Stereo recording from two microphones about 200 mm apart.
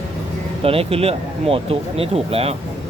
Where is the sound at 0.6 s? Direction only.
30° right (ahead or behind).